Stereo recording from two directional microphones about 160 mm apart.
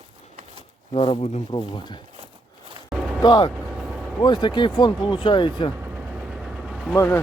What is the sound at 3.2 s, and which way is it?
Speech, 25° left (ahead or behind).